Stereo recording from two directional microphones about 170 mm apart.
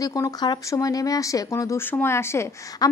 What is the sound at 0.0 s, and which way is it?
A woman's voice, 20° left (ahead or behind).